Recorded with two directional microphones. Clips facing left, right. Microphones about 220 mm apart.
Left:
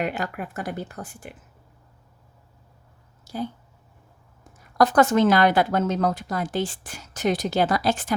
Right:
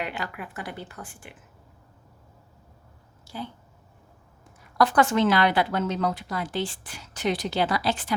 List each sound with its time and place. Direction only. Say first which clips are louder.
0.0 s a woman's voice: left 5 dB; 45° left (ahead or behind)
3.2 s speech: left 6 dB; 45° left (ahead or behind)
4.8 s a woman's voice: left 3 dB; 45° left (ahead or behind)